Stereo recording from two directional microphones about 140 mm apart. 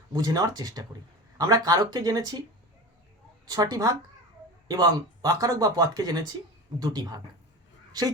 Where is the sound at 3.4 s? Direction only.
25° right (ahead or behind).